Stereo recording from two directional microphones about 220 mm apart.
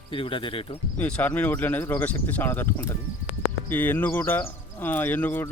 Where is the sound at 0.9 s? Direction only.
5° left (ahead or behind).